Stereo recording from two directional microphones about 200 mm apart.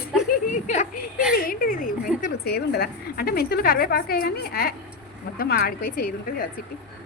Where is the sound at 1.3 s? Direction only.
45° left (ahead or behind).